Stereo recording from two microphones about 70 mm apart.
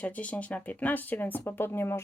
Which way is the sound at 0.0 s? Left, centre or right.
Centre.